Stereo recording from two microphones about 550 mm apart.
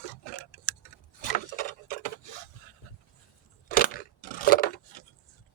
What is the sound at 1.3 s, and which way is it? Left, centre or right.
Tick-tock, centre.